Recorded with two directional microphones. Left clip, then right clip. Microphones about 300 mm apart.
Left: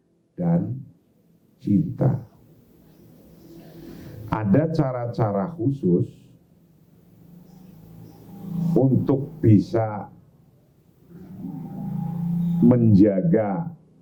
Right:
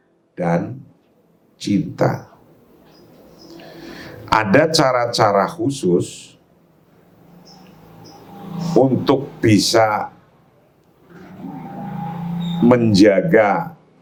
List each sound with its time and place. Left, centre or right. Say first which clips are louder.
0.3 s speech: right 7 dB; centre
3.8 s speech: right 11 dB; centre
8.3 s a sound: right 6 dB; centre
9.2 s speech: right 5 dB; centre
11.1 s a sound: right 4 dB; centre
12.7 s speech: right 8 dB; centre